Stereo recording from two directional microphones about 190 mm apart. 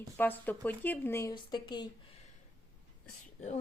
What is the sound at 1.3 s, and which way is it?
Speech, 25° left (ahead or behind).